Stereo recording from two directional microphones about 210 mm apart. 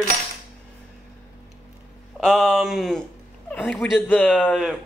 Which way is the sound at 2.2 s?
Centre (ahead or behind).